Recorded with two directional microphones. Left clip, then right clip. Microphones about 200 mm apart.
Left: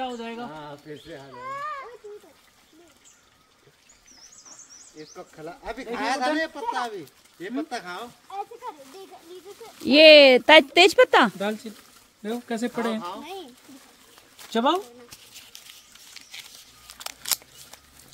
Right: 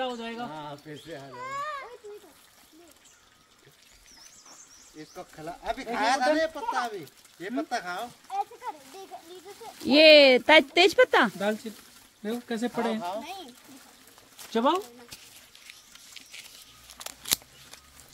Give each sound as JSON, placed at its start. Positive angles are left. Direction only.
{"t": 0.0, "sound": "a sound", "side_deg": -45}
{"t": 4.9, "sound": "speech", "side_deg": -60}
{"t": 5.9, "sound": "a man's voice", "side_deg": -30}
{"t": 6.2, "sound": "a man's voice", "side_deg": -10}
{"t": 9.8, "sound": "speech", "side_deg": 15}
{"t": 11.3, "sound": "speech", "side_deg": 0}
{"t": 12.2, "sound": "speech", "side_deg": 20}
{"t": 13.0, "sound": "speech", "side_deg": -25}
{"t": 14.4, "sound": "speech", "side_deg": 30}